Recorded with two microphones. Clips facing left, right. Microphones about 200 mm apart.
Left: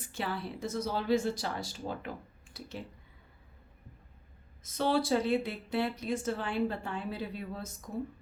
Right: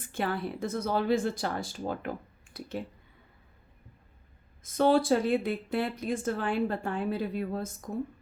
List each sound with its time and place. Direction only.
0.0 s speech: 55° right (ahead or behind)
4.6 s speech: 50° right (ahead or behind)